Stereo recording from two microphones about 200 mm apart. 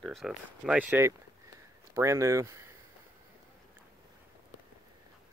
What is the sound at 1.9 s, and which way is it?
Speech, 15° right (ahead or behind).